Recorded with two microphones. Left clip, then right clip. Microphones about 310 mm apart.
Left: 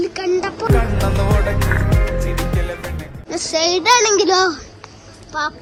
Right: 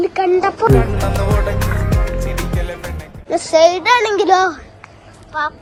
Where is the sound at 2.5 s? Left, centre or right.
Centre.